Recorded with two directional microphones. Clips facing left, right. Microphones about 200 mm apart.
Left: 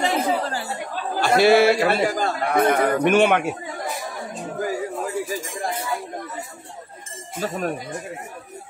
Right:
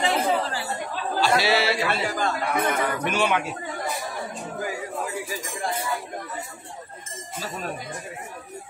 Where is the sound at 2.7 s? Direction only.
55° left (ahead or behind).